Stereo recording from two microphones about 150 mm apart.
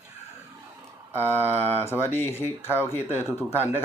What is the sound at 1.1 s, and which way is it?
Speech, 15° right (ahead or behind).